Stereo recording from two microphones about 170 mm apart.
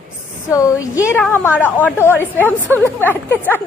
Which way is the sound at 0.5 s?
20° left (ahead or behind).